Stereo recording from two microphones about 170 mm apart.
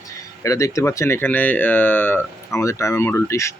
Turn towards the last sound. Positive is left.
turn(degrees=15)  # may be behind; listen again after turning